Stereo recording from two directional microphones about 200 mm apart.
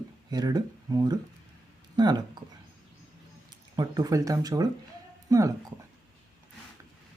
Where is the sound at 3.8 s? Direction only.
20° right (ahead or behind).